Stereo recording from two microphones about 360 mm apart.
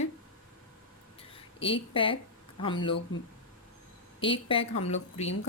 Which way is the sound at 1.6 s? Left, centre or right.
Centre.